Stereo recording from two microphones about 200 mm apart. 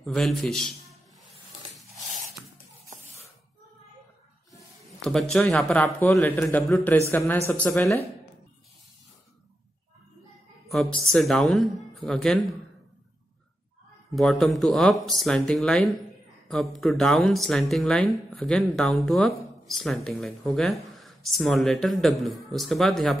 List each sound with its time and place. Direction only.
0.0 s speech: centre (ahead or behind)
1.8 s a sound: centre (ahead or behind)
4.6 s speech: centre (ahead or behind)
10.7 s speech: centre (ahead or behind)
14.1 s speech: centre (ahead or behind)